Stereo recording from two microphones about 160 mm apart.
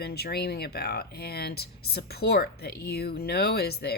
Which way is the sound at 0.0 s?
80° left.